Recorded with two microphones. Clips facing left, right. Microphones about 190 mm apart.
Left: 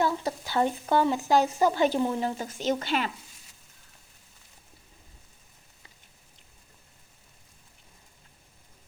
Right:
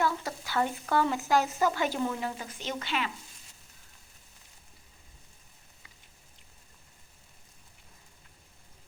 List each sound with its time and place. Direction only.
0.0 s speech: 30° left (ahead or behind)